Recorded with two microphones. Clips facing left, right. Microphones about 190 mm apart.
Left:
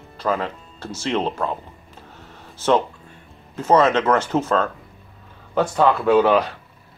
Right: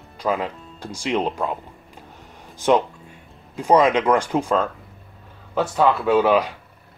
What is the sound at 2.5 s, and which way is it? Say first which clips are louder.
Speech: right 1 dB; 15° right (ahead or behind).